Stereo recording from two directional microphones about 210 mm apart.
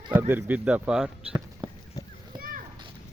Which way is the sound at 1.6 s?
25° right (ahead or behind).